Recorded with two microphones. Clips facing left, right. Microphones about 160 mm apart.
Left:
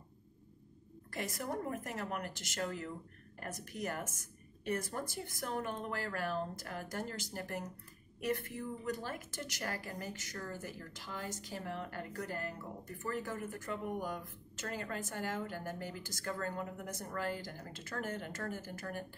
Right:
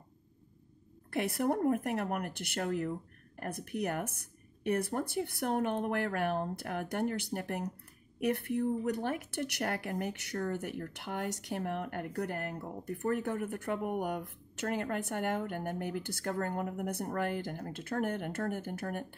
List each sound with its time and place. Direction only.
1.1 s a woman's voice: 60° right (ahead or behind)